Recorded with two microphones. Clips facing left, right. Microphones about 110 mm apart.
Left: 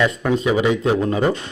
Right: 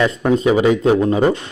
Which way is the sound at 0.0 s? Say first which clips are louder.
Right 3 dB; 25° right (ahead or behind).